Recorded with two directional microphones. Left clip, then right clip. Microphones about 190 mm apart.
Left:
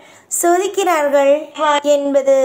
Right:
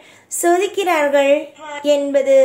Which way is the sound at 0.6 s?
15° right (ahead or behind).